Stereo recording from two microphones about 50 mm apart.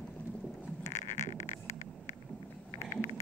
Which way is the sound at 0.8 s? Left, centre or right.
Left.